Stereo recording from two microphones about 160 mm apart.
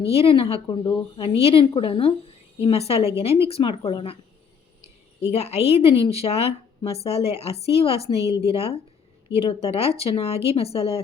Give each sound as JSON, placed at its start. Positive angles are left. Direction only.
{"t": 0.1, "sound": "a woman's voice", "side_deg": 35}
{"t": 5.2, "sound": "a woman's voice", "side_deg": 40}